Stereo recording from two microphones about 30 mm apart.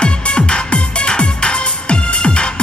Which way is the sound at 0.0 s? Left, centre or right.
Left.